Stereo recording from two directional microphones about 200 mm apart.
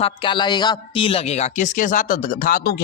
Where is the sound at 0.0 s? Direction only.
25° left (ahead or behind).